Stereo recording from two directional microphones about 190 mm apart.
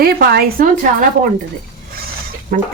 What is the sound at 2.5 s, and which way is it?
Speech, 50° right (ahead or behind).